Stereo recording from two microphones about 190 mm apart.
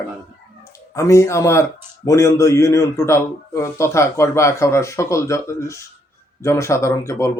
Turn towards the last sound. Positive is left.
turn(degrees=15)  # may be behind; listen again after turning